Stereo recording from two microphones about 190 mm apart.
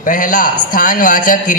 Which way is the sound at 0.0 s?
45° left (ahead or behind).